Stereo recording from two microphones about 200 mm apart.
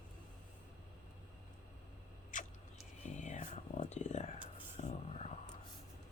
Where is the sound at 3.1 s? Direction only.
35° left (ahead or behind).